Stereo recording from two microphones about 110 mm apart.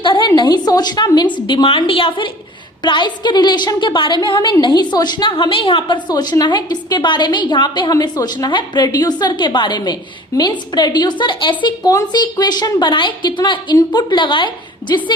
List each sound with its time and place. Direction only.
0.0 s a woman's voice: 50° left (ahead or behind)
11.8 s a woman's voice: 35° left (ahead or behind)